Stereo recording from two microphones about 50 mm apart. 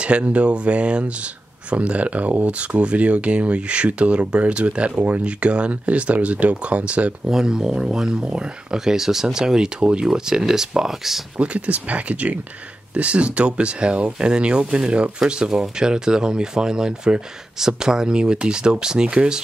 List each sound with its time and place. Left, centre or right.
0.0 s speech: right
7.2 s speech: centre
11.3 s speech: right